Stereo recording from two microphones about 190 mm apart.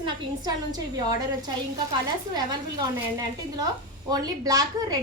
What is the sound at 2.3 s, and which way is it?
A woman's voice, 20° right (ahead or behind).